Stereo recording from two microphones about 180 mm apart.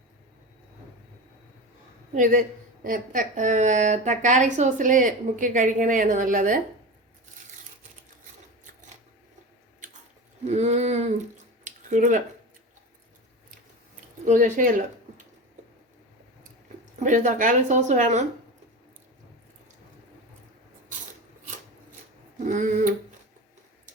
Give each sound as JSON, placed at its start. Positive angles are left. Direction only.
{"t": 2.1, "sound": "a woman's voice", "side_deg": -45}
{"t": 10.4, "sound": "a sound", "side_deg": -40}
{"t": 14.3, "sound": "a woman's voice", "side_deg": -45}
{"t": 17.0, "sound": "a woman's voice", "side_deg": -45}
{"t": 22.4, "sound": "a woman's voice", "side_deg": -45}